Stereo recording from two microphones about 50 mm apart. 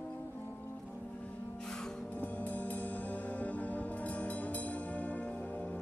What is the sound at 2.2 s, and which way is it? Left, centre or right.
Music, left.